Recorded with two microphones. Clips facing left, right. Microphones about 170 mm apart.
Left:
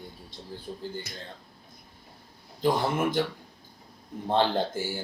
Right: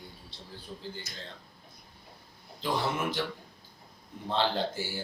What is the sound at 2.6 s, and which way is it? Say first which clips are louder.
Speech: left 6 dB; 50° left (ahead or behind).